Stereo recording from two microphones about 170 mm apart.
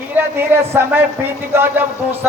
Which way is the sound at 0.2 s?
10° right (ahead or behind).